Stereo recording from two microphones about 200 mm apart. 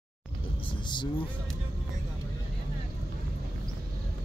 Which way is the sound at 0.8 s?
25° left (ahead or behind).